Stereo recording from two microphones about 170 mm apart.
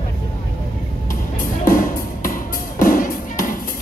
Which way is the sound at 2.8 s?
50° left (ahead or behind).